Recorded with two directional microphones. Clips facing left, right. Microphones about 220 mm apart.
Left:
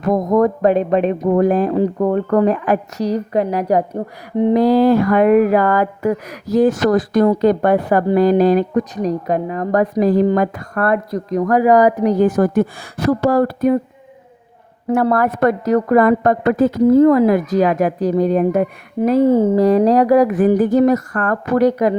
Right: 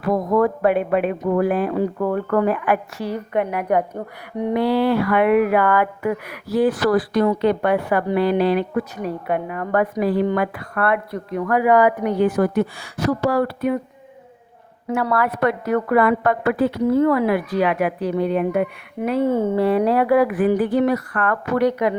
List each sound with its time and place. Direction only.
0.0 s a woman's voice: 45° left (ahead or behind)
15.1 s a woman's voice: 45° left (ahead or behind)